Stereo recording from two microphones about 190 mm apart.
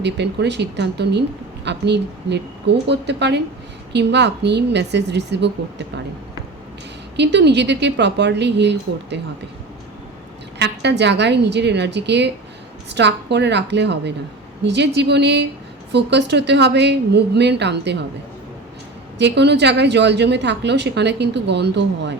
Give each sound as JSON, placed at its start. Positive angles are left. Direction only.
{"t": 0.0, "sound": "a woman's voice", "side_deg": -65}
{"t": 7.2, "sound": "a woman's voice", "side_deg": -65}
{"t": 10.6, "sound": "a woman's voice", "side_deg": -65}
{"t": 19.2, "sound": "a woman's voice", "side_deg": -65}